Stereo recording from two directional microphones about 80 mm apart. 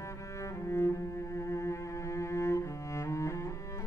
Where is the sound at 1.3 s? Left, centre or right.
Left.